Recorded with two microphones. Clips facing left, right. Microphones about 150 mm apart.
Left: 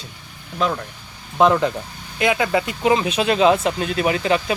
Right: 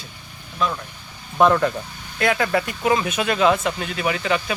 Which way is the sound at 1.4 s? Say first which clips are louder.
Left 1 dB; 15° left (ahead or behind).